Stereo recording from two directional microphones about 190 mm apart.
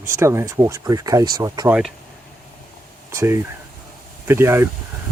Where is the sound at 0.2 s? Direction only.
15° right (ahead or behind).